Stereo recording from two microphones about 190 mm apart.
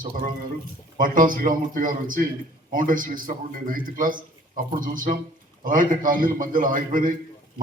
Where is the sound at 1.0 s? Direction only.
45° right (ahead or behind).